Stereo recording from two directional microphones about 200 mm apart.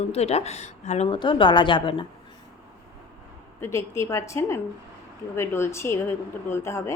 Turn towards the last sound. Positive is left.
turn(degrees=15)  # may be behind; listen again after turning